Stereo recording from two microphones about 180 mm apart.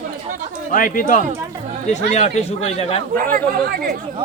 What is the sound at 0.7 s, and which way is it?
Speech, 50° left (ahead or behind).